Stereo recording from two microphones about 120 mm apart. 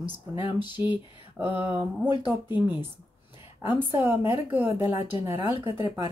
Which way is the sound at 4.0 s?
15° right (ahead or behind).